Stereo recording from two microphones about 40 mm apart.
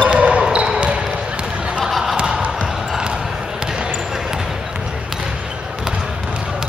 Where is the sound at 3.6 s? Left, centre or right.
Right.